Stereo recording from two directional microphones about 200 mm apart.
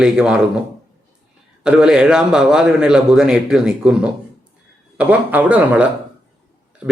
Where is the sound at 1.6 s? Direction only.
5° right (ahead or behind).